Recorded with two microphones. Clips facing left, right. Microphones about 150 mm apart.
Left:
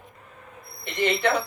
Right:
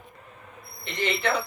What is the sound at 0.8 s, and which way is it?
Speech, 20° left (ahead or behind).